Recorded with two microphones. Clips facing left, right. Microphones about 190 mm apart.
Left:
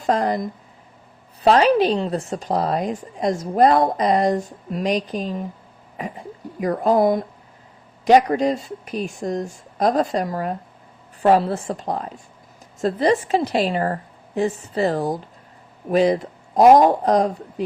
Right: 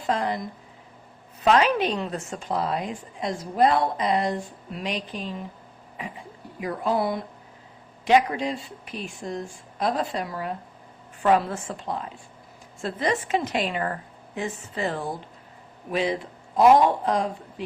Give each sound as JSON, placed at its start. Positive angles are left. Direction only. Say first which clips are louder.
{"t": 0.0, "sound": "a woman's voice", "louder": "left 6 dB", "side_deg": 40}